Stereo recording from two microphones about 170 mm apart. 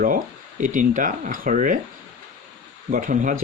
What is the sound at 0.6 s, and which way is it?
Speech, 50° right (ahead or behind).